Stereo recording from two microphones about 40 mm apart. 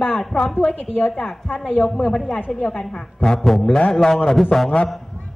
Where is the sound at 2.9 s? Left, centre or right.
Left.